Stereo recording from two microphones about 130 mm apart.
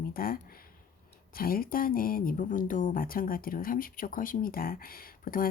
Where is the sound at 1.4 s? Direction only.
90° left.